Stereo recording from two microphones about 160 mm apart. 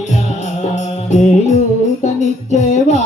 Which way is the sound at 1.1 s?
45° left (ahead or behind).